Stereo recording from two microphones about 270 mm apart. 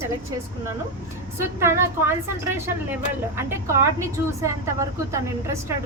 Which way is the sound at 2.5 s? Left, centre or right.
Centre.